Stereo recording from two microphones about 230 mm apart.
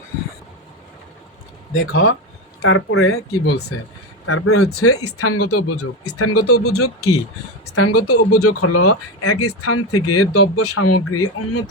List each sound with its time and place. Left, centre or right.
1.7 s speech: left
7.8 s speech: left